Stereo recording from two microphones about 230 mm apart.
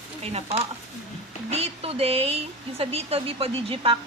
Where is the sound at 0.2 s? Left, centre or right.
Right.